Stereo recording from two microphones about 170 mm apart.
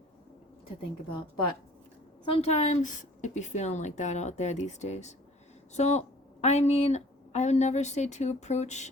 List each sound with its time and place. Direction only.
2.2 s a woman's voice: 35° left (ahead or behind)